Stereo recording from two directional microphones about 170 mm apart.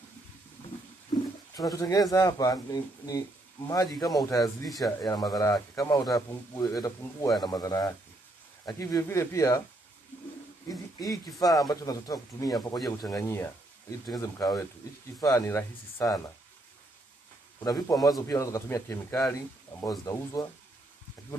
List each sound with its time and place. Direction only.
1.6 s speech: 20° left (ahead or behind)
10.7 s speech: 20° left (ahead or behind)
17.6 s speech: 20° left (ahead or behind)